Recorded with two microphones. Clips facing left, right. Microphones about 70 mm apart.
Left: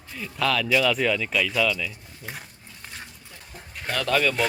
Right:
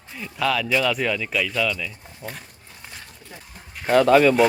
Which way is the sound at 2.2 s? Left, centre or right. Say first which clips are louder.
Right 3 dB; centre.